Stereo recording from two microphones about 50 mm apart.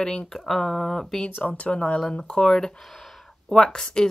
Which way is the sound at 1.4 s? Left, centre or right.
Left.